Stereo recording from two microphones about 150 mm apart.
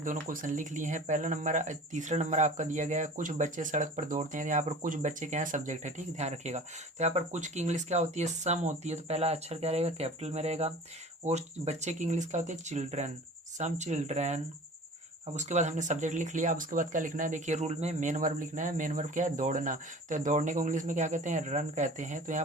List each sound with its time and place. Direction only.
0.0 s speech: 60° right (ahead or behind)